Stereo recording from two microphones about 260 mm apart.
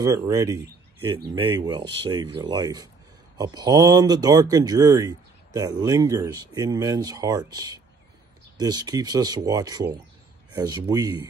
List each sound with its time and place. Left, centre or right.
0.0 s speech: centre